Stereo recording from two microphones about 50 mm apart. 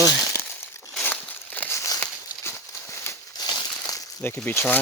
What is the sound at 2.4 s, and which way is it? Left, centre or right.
Clip-clop, left.